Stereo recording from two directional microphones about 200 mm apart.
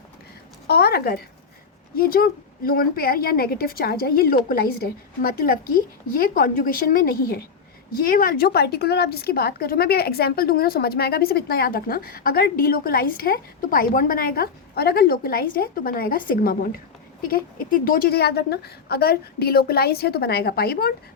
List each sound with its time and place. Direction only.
0.7 s a woman's voice: 55° left (ahead or behind)